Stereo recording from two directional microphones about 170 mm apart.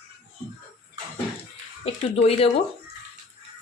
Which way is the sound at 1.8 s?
35° left (ahead or behind).